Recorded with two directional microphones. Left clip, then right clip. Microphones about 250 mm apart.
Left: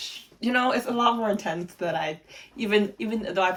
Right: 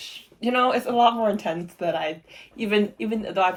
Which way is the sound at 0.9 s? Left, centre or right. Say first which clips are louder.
Right 4 dB; right.